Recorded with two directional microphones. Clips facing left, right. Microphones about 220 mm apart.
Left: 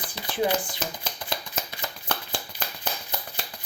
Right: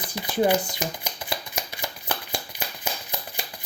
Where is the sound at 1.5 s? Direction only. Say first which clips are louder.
Right 1 dB; 10° right (ahead or behind).